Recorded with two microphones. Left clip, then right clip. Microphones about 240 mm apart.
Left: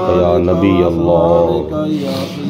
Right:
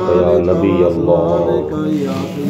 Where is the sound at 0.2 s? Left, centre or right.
Left.